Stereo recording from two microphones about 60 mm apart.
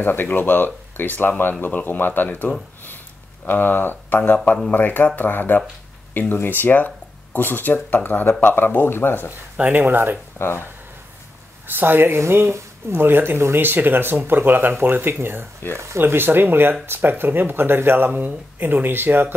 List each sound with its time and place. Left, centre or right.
0.0 s speech: left
9.6 s speech: right
10.4 s speech: centre
11.6 s speech: right